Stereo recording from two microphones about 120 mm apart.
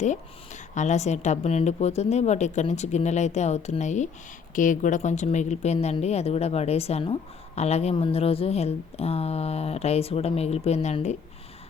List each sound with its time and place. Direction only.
0.7 s a woman's voice: 80° left
4.5 s speech: 90° left; by 11.2 s 70° left (ahead or behind)